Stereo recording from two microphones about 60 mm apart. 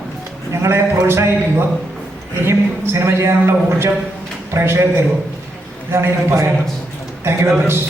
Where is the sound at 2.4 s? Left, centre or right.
Right.